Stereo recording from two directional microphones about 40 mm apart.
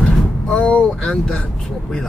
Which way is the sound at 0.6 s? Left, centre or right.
Left.